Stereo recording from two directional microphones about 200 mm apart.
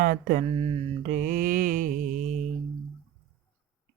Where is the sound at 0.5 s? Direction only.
30° right (ahead or behind).